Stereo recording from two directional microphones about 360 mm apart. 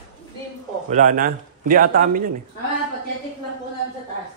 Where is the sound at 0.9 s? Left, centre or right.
Right.